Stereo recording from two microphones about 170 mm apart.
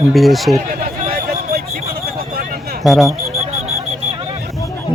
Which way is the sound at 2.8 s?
Centre (ahead or behind).